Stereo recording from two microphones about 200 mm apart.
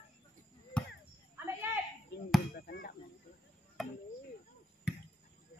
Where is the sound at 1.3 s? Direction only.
10° right (ahead or behind).